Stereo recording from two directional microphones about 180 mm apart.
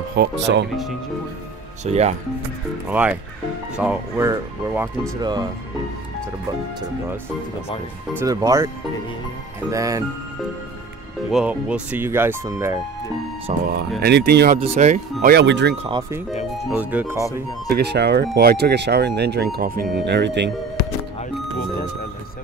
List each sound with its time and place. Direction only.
0.1 s speech: 65° right (ahead or behind)
1.9 s speech: 35° right (ahead or behind)
2.9 s speech: 10° right (ahead or behind)
5.2 s speech: 25° right (ahead or behind)
8.2 s speech: 20° right (ahead or behind)
9.7 s speech: 20° right (ahead or behind)
11.2 s speech: 5° right (ahead or behind)
13.7 s speech: 65° right (ahead or behind)
14.5 s speech: 40° right (ahead or behind)
15.3 s speech: 75° right (ahead or behind)
16.6 s speech: 5° right (ahead or behind)
17.6 s speech: 60° right (ahead or behind)
20.1 s speech: 70° right (ahead or behind)